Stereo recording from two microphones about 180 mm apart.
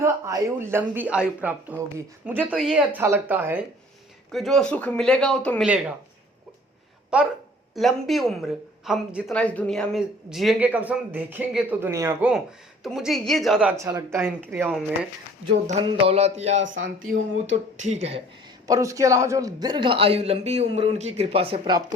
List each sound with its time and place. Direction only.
0.0 s a woman's voice: 15° right (ahead or behind)
4.3 s speech: centre (ahead or behind)
5.6 s a woman's voice: 5° right (ahead or behind)
7.1 s speech: 5° right (ahead or behind)
12.8 s speech: centre (ahead or behind)
13.7 s a woman's voice: 15° right (ahead or behind)
15.8 s speech: 30° right (ahead or behind)
18.7 s a man's voice: 15° right (ahead or behind)